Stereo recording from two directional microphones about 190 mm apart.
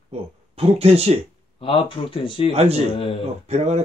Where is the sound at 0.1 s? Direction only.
30° right (ahead or behind).